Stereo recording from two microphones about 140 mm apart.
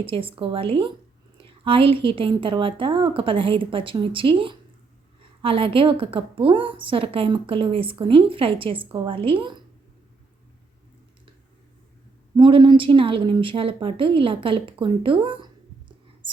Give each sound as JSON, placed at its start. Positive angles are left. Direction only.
{"t": 0.0, "sound": "a woman's voice", "side_deg": -40}
{"t": 12.4, "sound": "a woman's voice", "side_deg": -35}
{"t": 16.2, "sound": "whispering", "side_deg": -35}